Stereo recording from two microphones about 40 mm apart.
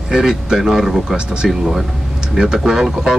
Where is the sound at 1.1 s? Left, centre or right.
Right.